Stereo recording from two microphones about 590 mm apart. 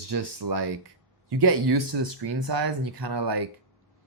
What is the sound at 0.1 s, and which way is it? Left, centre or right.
Speech, right.